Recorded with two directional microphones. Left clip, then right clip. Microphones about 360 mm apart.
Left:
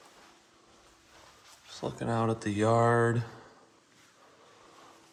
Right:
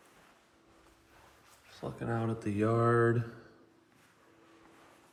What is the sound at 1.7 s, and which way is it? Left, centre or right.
Speech, centre.